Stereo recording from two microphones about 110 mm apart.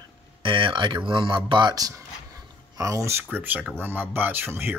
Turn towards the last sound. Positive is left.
turn(degrees=-20)  # may be behind; listen again after turning